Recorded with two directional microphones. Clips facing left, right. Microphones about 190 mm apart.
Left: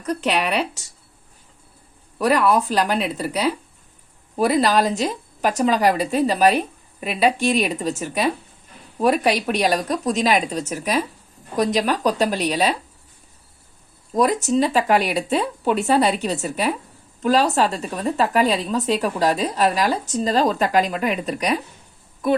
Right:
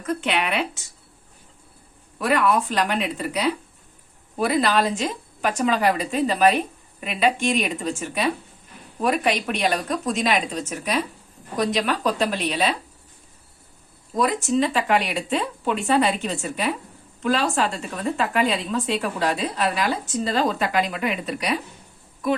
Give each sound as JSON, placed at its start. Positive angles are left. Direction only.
{"t": 0.0, "sound": "speech", "side_deg": 40}
{"t": 2.1, "sound": "speech", "side_deg": 40}
{"t": 14.2, "sound": "speech", "side_deg": 40}